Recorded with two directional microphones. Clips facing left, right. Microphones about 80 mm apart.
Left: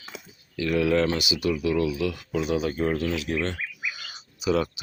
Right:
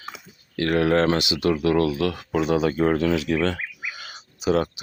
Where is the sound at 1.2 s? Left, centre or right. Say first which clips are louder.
Right 4 dB; right.